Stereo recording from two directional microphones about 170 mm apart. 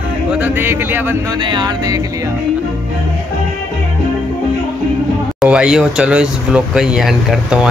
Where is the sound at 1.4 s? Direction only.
25° right (ahead or behind).